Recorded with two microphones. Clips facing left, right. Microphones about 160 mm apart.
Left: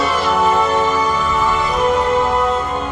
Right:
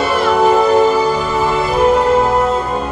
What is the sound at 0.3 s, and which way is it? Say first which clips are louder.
Music: right 5 dB; 35° right (ahead or behind).